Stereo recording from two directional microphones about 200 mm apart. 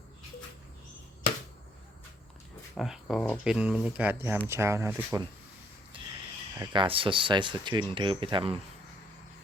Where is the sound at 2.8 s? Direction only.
Centre (ahead or behind).